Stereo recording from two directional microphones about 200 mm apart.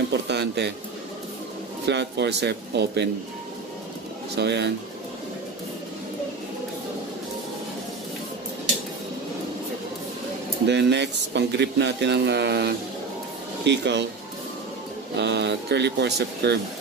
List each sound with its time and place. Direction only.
0.3 s speech: 60° right (ahead or behind)
1.9 s speech: 60° right (ahead or behind)
4.4 s speech: 60° right (ahead or behind)
10.7 s speech: 60° right (ahead or behind)
15.1 s speech: 60° right (ahead or behind)